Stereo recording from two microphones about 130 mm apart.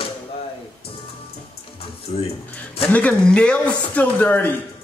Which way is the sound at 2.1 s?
50° left (ahead or behind).